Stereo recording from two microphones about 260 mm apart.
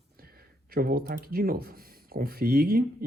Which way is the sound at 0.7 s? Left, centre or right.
Right.